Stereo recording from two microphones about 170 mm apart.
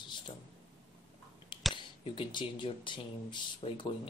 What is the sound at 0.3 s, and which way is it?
Speech, 30° left (ahead or behind).